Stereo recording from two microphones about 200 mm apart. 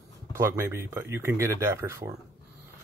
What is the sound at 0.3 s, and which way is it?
Speech, 15° right (ahead or behind).